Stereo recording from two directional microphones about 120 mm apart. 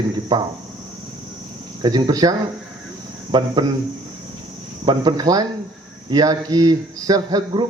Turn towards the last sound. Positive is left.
turn(degrees=-30)  # may be behind; listen again after turning